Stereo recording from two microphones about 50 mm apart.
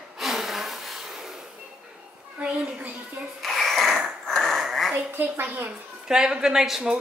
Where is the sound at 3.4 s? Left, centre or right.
Centre.